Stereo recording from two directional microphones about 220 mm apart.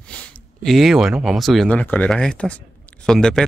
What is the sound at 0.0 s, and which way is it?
Speech, 5° left (ahead or behind).